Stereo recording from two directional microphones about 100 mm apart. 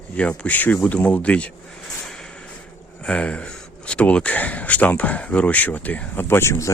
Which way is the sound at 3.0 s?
10° left (ahead or behind).